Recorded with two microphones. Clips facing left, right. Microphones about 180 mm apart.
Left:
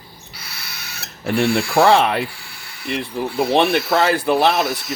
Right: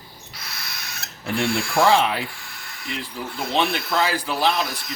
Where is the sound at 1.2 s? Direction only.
70° left (ahead or behind).